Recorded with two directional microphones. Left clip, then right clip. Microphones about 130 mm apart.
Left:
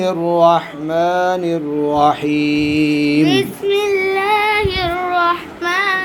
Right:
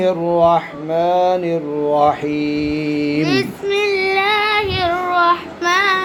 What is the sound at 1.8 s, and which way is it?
Mantra, 35° left (ahead or behind).